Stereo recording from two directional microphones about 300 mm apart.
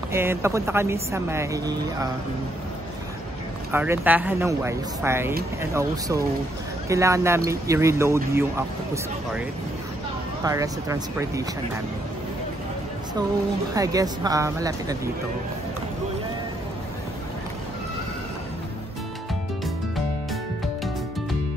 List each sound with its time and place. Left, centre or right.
0.1 s speech: centre
3.7 s speech: centre
10.4 s speech: centre
13.7 s speech: centre